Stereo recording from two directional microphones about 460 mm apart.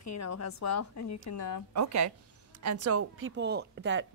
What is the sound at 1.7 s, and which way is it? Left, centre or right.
A woman's voice, right.